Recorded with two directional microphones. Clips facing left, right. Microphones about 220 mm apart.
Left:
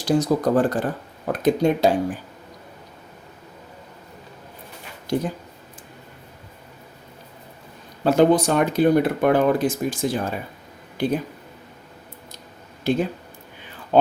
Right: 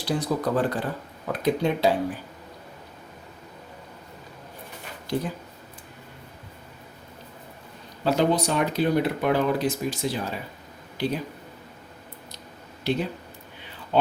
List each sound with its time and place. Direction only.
0.0 s speech: 45° left (ahead or behind)
5.1 s speech: 45° left (ahead or behind)
8.0 s speech: 50° left (ahead or behind)
12.9 s speech: 50° left (ahead or behind)